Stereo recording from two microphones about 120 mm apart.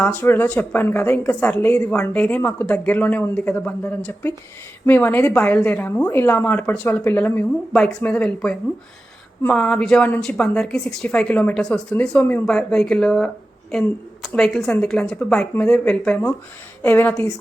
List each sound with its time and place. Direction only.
0.0 s a woman's voice: 15° left (ahead or behind)
7.7 s a woman's voice: 5° left (ahead or behind)